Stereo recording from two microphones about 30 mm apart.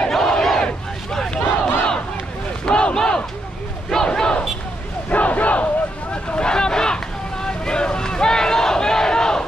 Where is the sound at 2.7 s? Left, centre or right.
Left.